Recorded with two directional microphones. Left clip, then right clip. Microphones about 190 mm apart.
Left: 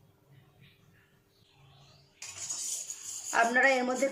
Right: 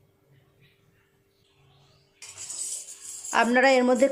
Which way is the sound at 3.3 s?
50° right (ahead or behind).